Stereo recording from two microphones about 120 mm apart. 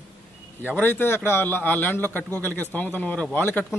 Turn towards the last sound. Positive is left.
turn(degrees=20)  # may be behind; listen again after turning